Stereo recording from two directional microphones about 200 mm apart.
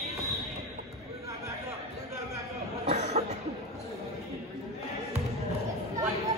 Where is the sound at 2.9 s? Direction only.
35° right (ahead or behind).